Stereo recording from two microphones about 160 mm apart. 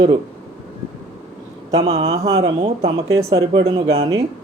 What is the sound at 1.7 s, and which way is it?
Speech, 35° right (ahead or behind).